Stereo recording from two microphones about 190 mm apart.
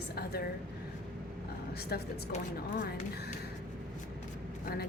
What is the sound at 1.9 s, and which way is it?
Speech, 55° left (ahead or behind).